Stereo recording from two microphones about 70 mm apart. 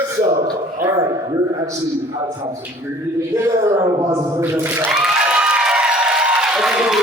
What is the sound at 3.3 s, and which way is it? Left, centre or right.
Speech, right.